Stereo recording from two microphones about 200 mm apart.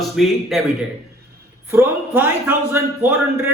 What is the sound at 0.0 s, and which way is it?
Speech, centre (ahead or behind).